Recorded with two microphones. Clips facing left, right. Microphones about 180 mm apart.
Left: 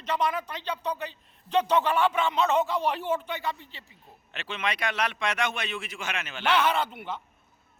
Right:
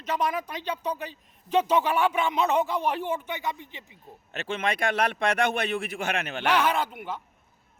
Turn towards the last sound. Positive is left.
turn(degrees=-10)  # may be behind; listen again after turning